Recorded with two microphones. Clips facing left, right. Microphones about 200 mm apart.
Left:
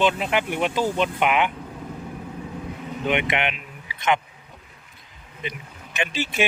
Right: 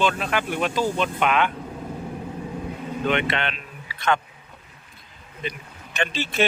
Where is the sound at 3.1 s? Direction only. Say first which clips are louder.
Left 1 dB; 15° left (ahead or behind).